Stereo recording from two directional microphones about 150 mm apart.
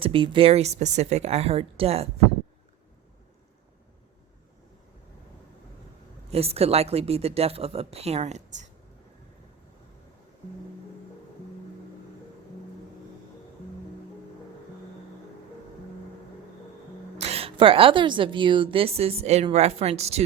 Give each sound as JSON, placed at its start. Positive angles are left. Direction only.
{"t": 0.0, "sound": "speech", "side_deg": -35}
{"t": 6.3, "sound": "speech", "side_deg": -40}
{"t": 17.2, "sound": "speech", "side_deg": -45}